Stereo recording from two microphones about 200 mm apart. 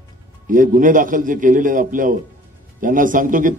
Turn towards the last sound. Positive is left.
turn(degrees=-40)  # may be behind; listen again after turning